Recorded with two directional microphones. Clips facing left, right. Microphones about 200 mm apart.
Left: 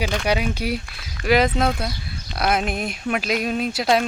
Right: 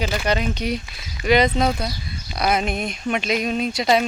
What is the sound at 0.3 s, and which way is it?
Speech, 10° left (ahead or behind).